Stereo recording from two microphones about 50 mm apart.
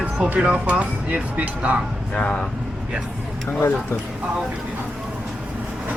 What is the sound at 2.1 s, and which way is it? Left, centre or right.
Speech, centre.